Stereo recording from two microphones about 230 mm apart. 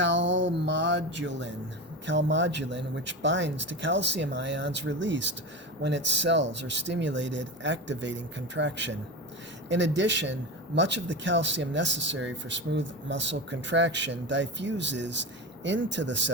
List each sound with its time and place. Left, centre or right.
0.0 s speech: right